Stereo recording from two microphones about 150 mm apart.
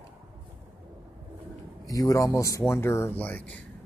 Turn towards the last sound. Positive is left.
turn(degrees=10)  # may be behind; listen again after turning